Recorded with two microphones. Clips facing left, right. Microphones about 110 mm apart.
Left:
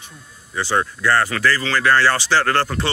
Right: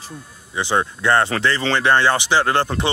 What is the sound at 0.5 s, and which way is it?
Speech, 20° right (ahead or behind).